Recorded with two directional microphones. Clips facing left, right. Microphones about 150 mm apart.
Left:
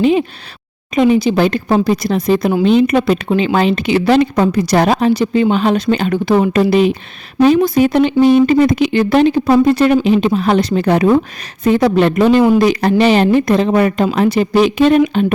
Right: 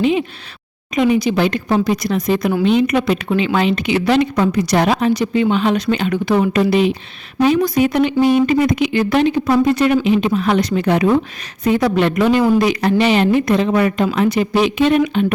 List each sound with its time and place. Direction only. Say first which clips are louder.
0.0 s a woman's voice: left 4 dB; 40° left (ahead or behind)